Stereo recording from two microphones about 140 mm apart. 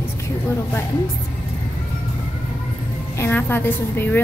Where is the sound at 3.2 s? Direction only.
15° left (ahead or behind).